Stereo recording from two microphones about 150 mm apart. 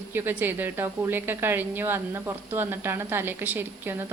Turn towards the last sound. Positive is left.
turn(degrees=-15)  # may be behind; listen again after turning